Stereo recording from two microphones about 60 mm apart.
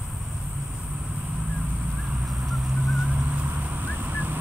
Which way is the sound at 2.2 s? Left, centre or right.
Centre.